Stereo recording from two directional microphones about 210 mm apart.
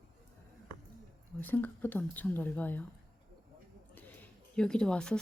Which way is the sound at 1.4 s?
10° left (ahead or behind).